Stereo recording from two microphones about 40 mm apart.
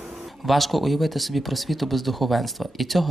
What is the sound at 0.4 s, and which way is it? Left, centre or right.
Speech, centre.